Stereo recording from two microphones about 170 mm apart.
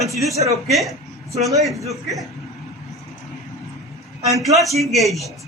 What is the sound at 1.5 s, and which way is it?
Speech, centre (ahead or behind).